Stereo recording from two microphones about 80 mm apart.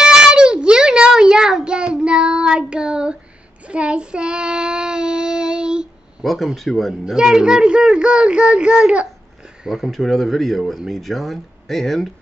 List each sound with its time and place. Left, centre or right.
0.0 s a sound: centre
3.6 s child singing: centre
6.2 s speech: centre